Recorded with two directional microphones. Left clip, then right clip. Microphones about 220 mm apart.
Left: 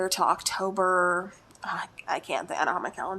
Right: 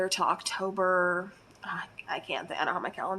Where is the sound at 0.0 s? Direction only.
30° left (ahead or behind).